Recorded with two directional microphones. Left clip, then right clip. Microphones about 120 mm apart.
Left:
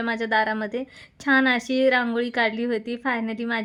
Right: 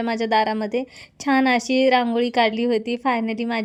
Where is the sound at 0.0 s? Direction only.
45° right (ahead or behind).